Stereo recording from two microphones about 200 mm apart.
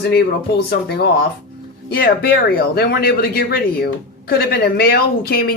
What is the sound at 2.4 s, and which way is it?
Speech, 50° left (ahead or behind).